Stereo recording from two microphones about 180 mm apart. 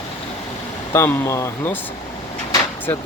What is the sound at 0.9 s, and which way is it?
Speech, 15° left (ahead or behind).